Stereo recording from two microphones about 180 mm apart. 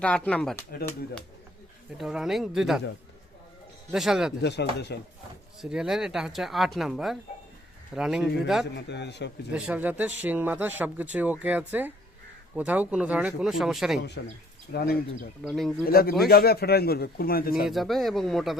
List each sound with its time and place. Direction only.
0.0 s speech: 5° left (ahead or behind)
2.0 s speech: centre (ahead or behind)
3.9 s speech: centre (ahead or behind)
4.4 s a man's voice: 70° left (ahead or behind)
5.6 s speech: 5° right (ahead or behind)
8.6 s a man's voice: 70° left (ahead or behind)
9.5 s speech: 5° right (ahead or behind)
14.7 s a man's voice: 60° left (ahead or behind)
15.4 s speech: centre (ahead or behind)
15.9 s a man's voice: 55° left (ahead or behind)
17.7 s speech: centre (ahead or behind)